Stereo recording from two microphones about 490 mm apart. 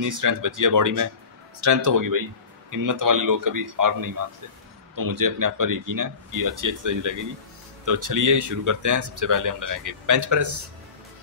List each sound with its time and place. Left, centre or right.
0.0 s speech: right